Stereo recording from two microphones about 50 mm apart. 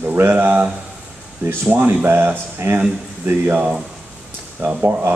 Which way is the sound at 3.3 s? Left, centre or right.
Right.